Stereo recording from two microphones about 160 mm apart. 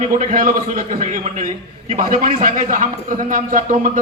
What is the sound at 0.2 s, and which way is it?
A man's voice, 50° right (ahead or behind).